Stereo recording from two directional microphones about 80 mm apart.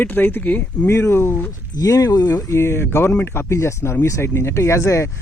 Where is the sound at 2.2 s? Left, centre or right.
Left.